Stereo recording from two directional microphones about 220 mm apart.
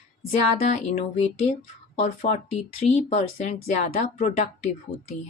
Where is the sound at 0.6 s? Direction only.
30° left (ahead or behind).